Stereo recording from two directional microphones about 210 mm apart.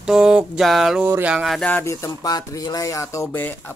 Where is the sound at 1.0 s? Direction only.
10° right (ahead or behind).